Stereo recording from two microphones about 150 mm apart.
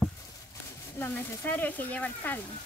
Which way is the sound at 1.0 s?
10° left (ahead or behind).